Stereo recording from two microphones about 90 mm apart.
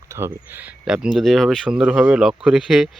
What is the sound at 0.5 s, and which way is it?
Speech, 15° right (ahead or behind).